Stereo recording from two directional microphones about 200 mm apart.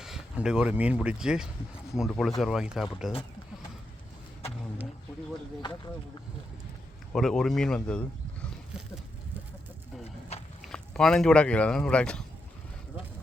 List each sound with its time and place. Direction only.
0.0 s speech: 5° right (ahead or behind)
7.1 s speech: centre (ahead or behind)
10.0 s a sound: 30° left (ahead or behind)
10.7 s speech: 5° left (ahead or behind)